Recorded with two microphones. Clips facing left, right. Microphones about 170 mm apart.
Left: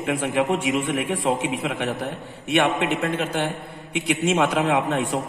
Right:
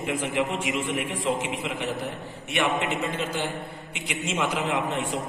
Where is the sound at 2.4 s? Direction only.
65° left (ahead or behind).